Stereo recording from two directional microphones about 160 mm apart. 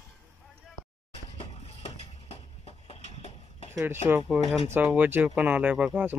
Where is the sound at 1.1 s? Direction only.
40° left (ahead or behind).